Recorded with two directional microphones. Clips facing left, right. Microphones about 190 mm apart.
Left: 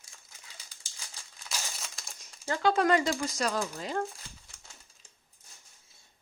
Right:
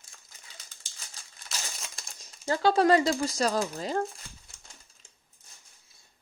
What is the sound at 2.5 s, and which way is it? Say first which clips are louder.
Speech: right 3 dB; 35° right (ahead or behind).